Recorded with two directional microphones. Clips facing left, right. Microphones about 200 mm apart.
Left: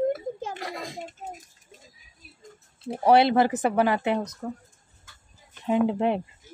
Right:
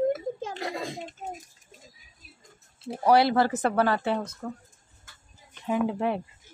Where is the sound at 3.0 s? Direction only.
20° left (ahead or behind).